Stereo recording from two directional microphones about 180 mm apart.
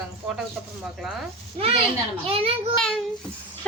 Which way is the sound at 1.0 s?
Centre (ahead or behind).